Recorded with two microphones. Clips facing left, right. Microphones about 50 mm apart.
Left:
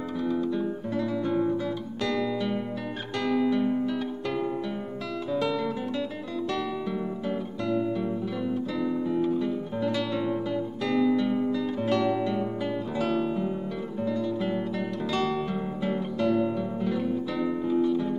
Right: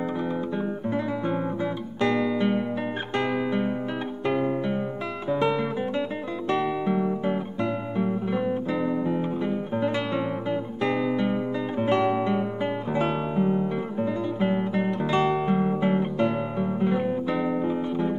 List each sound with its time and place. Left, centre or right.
0.6 s guitar: right
4.3 s music: right
5.3 s guitar: right